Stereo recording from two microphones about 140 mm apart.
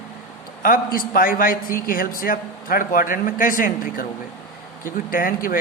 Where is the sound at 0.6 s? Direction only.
90° left.